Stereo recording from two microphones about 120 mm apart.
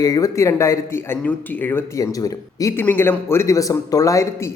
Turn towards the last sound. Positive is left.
turn(degrees=25)  # may be behind; listen again after turning